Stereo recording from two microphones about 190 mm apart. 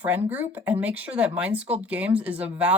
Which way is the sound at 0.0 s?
10° right (ahead or behind).